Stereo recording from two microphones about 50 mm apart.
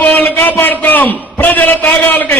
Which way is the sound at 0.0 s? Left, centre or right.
Left.